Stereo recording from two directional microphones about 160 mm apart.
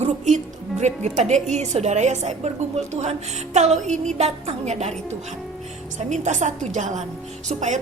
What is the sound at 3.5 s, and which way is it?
A woman's voice, 45° right (ahead or behind).